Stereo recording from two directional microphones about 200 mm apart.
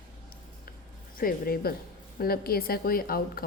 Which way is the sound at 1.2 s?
50° left (ahead or behind).